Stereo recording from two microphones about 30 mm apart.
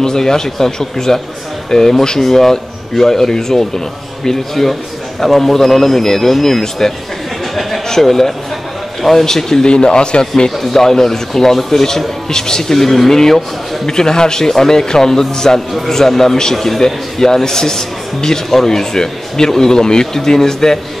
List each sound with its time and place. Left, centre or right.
0.0 s a man's voice: centre
8.0 s a man's voice: centre
9.7 s a man's voice: left
10.6 s a man's voice: centre